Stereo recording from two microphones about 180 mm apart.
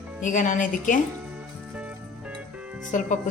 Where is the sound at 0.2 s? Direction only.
45° left (ahead or behind).